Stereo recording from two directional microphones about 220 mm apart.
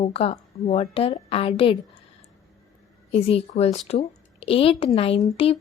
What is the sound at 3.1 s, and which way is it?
A woman's voice, 30° left (ahead or behind).